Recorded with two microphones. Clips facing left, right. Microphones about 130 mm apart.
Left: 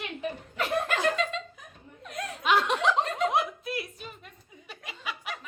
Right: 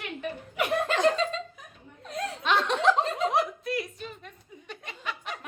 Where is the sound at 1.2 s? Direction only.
35° right (ahead or behind).